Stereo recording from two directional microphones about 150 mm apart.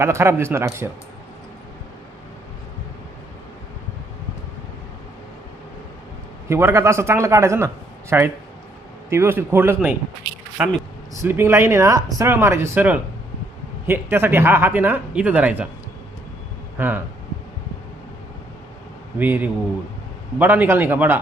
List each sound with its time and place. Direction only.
0.0 s speech: 15° right (ahead or behind)
6.5 s a man's voice: 15° right (ahead or behind)
16.7 s speech: 15° right (ahead or behind)
19.2 s speech: 10° right (ahead or behind)